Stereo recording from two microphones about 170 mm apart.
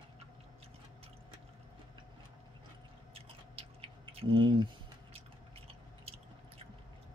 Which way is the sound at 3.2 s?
35° right (ahead or behind).